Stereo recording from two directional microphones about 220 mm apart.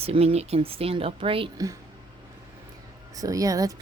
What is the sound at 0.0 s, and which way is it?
Speech, 25° right (ahead or behind).